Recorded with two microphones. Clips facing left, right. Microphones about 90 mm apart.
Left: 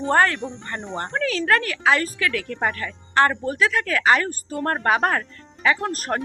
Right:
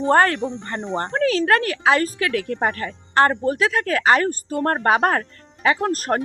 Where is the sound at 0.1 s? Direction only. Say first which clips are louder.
Right 2 dB; 40° right (ahead or behind).